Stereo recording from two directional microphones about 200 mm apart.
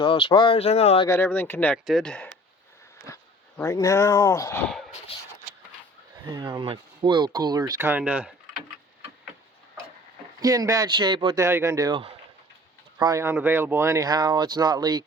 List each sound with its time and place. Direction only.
0.0 s speech: 25° left (ahead or behind)
1.0 s speech: 10° left (ahead or behind)
3.6 s speech: 15° left (ahead or behind)
5.1 s speech: 30° left (ahead or behind)
6.2 s speech: 20° right (ahead or behind)
10.4 s speech: 20° right (ahead or behind)